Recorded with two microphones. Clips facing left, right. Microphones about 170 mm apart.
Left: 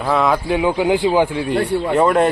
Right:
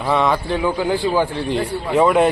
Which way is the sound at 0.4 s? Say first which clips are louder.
Left 3 dB; 15° left (ahead or behind).